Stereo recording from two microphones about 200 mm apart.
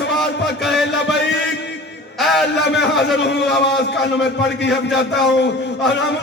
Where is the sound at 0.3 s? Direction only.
60° left (ahead or behind).